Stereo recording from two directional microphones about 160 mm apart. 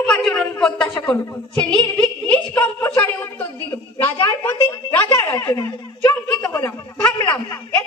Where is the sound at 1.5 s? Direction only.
5° left (ahead or behind).